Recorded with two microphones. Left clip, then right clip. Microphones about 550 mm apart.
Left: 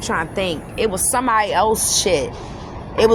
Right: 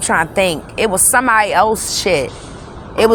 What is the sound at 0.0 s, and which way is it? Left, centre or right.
Speech, left.